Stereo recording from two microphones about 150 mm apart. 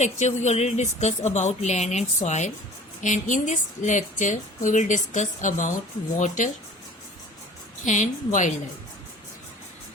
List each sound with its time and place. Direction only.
0.0 s a woman's voice: 50° left (ahead or behind)
7.9 s a woman's voice: 55° left (ahead or behind)